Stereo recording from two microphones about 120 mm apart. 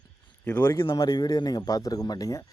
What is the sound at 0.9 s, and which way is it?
Speech, 35° left (ahead or behind).